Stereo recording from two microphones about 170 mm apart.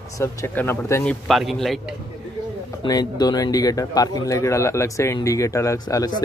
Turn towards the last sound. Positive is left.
turn(degrees=20)  # may be behind; listen again after turning